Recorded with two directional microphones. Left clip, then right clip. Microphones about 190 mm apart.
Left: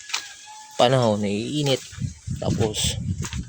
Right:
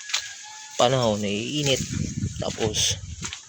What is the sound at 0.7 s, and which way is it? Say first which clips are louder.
Speech: left 2 dB; 20° left (ahead or behind).